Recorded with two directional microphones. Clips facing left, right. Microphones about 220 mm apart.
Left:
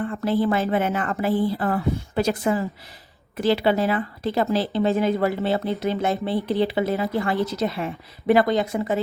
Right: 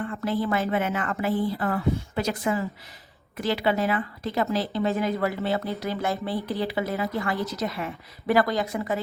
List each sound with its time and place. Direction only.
0.1 s speech: 30° left (ahead or behind)